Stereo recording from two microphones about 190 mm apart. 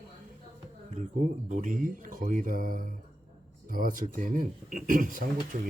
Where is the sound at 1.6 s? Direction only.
45° right (ahead or behind).